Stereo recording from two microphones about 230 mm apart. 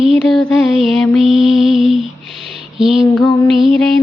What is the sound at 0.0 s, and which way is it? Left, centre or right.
Mantra, centre.